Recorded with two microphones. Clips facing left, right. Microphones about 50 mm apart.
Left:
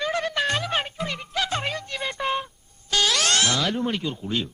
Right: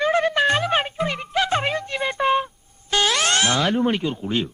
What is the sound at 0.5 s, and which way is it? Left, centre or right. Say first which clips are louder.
Music: right 5 dB; centre.